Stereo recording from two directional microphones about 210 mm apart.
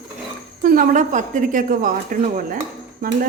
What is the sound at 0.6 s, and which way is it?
A woman's voice, 40° right (ahead or behind).